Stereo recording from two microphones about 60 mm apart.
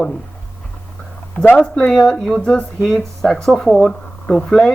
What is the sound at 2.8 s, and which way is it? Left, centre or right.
Speech, centre.